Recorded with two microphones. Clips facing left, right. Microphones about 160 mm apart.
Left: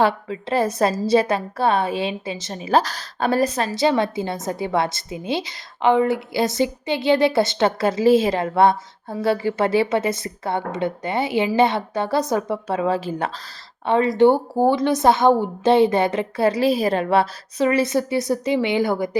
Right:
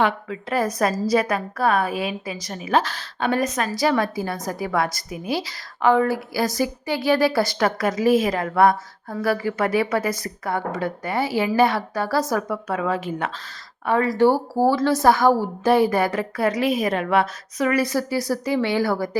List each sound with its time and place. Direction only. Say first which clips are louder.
0.0 s a woman's voice: left 2 dB; 30° left (ahead or behind)
13.8 s a woman's voice: left 2 dB; 20° left (ahead or behind)